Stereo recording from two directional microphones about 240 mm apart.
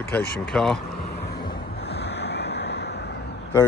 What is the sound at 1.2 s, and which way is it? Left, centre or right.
Vehicle, left.